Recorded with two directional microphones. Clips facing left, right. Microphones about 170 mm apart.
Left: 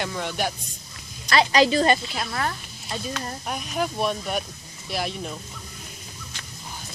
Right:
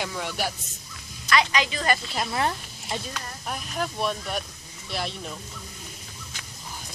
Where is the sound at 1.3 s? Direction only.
35° left (ahead or behind).